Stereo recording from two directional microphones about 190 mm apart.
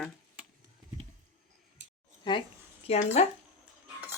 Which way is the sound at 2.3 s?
25° left (ahead or behind).